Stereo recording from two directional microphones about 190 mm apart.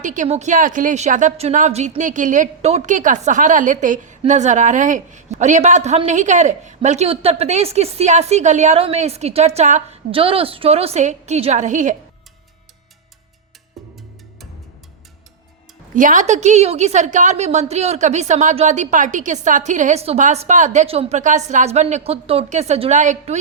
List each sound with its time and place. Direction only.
0.0 s a woman's voice: 40° right (ahead or behind)
13.8 s music: centre (ahead or behind)
16.0 s a woman's voice: 40° right (ahead or behind)